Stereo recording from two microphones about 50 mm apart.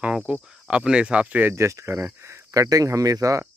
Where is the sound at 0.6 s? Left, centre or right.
Centre.